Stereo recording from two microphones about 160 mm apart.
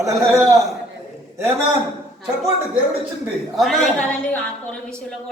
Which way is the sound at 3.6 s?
5° left (ahead or behind).